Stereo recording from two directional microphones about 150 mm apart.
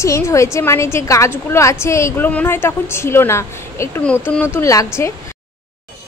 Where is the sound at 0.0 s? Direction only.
20° left (ahead or behind).